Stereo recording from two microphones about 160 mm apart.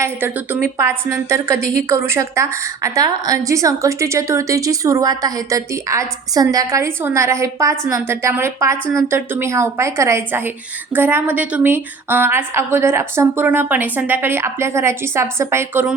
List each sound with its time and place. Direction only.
0.0 s a woman's voice: 10° right (ahead or behind)